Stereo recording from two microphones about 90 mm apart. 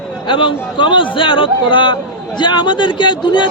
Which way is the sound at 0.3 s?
65° left (ahead or behind).